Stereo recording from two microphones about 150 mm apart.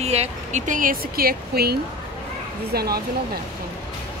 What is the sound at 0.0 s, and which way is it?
Speech, 45° right (ahead or behind).